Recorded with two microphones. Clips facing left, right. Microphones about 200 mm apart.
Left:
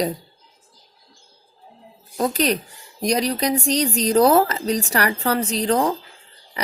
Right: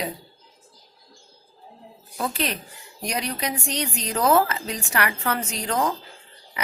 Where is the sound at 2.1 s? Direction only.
40° left (ahead or behind).